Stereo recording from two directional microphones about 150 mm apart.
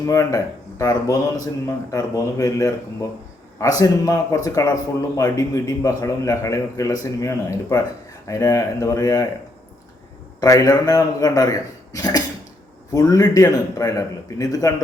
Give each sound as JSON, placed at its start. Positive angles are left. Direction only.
{"t": 0.0, "sound": "a man's voice", "side_deg": 20}
{"t": 10.4, "sound": "a man's voice", "side_deg": 20}